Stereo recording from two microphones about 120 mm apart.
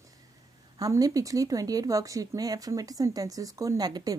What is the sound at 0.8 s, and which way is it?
Speech, 30° right (ahead or behind).